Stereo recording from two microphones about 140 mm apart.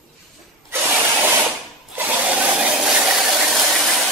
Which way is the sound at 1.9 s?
15° right (ahead or behind).